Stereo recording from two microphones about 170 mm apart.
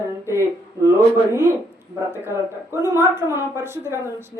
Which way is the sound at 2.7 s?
15° right (ahead or behind).